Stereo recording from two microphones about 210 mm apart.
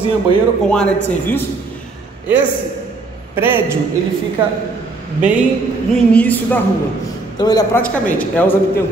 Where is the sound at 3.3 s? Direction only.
10° right (ahead or behind).